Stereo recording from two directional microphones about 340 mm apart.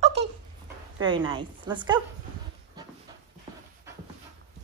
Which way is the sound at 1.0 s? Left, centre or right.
Centre.